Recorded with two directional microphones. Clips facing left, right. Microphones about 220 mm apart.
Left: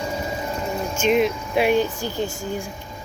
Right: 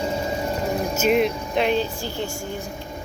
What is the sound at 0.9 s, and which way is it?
Speech, 5° right (ahead or behind).